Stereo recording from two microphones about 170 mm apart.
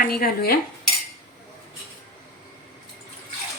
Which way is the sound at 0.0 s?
60° left (ahead or behind).